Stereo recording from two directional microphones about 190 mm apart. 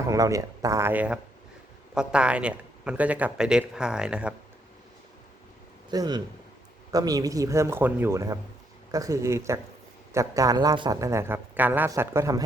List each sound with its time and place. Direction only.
0.1 s a man's voice: 15° right (ahead or behind)
5.9 s speech: 20° right (ahead or behind)